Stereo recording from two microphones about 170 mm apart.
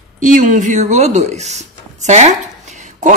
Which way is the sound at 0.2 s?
50° right (ahead or behind).